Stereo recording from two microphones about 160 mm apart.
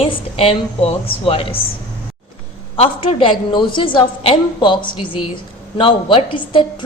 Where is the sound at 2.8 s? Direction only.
35° left (ahead or behind).